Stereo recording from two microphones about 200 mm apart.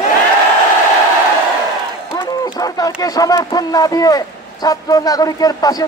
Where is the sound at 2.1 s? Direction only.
20° left (ahead or behind).